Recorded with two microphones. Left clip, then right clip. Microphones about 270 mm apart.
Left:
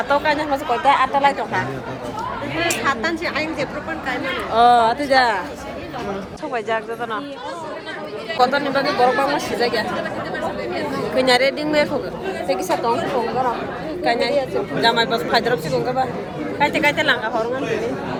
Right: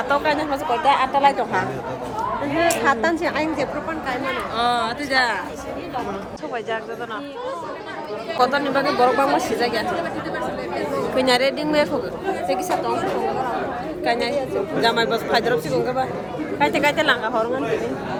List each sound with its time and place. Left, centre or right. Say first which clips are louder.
0.1 s speech: left 2 dB; centre
2.6 s a woman's voice: right 2 dB; right
4.5 s speech: left 9 dB; centre
8.4 s speech: left 2 dB; centre
11.2 s speech: left 3 dB; centre
14.0 s speech: left 3 dB; centre